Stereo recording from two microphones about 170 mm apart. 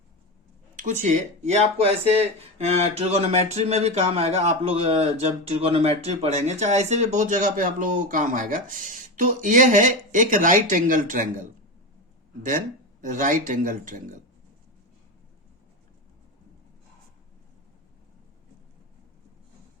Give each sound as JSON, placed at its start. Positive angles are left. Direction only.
{"t": 0.8, "sound": "speech", "side_deg": -50}
{"t": 12.4, "sound": "speech", "side_deg": -50}